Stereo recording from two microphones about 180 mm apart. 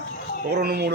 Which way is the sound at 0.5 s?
65° right (ahead or behind).